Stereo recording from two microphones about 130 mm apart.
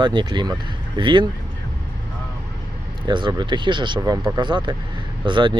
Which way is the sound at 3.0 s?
35° right (ahead or behind).